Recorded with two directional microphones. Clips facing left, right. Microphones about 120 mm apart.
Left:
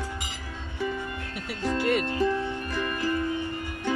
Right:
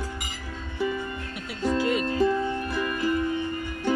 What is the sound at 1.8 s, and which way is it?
Music, 70° left (ahead or behind).